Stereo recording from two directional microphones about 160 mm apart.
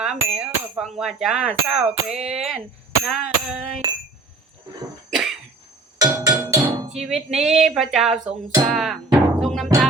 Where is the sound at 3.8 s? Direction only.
30° right (ahead or behind).